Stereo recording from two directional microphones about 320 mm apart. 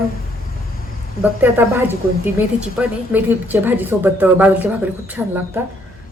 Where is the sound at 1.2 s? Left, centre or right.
Centre.